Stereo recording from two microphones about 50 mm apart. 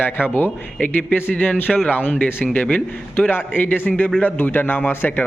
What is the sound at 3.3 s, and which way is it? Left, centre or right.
Speech, left.